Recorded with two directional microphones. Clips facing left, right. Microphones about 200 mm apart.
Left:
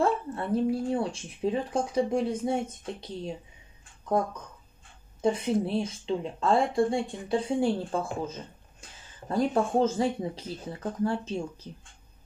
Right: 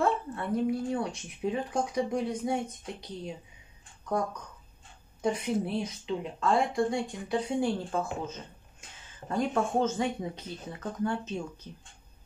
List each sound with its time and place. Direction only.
0.0 s speech: 30° left (ahead or behind)
5.2 s speech: 30° left (ahead or behind)
9.3 s speech: 35° left (ahead or behind)